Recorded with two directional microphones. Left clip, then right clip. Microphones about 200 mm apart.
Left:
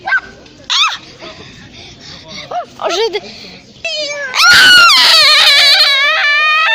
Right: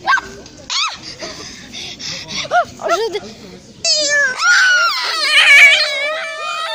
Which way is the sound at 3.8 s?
45° right (ahead or behind).